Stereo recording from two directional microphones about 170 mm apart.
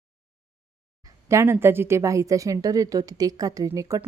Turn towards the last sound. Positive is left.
turn(degrees=-20)  # may be behind; listen again after turning